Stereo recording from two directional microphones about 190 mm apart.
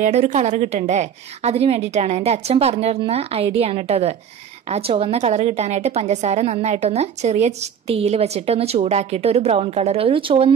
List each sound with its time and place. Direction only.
0.0 s a woman's voice: 40° right (ahead or behind)